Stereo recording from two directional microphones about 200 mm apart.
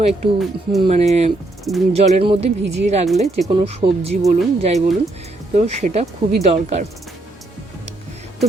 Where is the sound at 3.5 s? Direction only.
30° right (ahead or behind).